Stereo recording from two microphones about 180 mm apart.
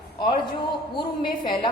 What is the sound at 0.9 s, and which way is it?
Speech, 25° left (ahead or behind).